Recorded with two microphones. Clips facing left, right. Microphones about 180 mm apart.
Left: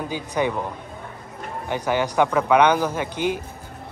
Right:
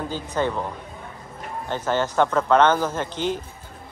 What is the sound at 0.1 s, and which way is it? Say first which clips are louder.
Speech: left 2 dB; 15° left (ahead or behind).